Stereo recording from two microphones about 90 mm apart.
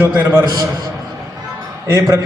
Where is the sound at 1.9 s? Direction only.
35° right (ahead or behind).